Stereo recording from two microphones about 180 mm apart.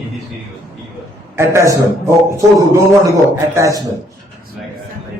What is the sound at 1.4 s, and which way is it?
A man's voice, 15° right (ahead or behind).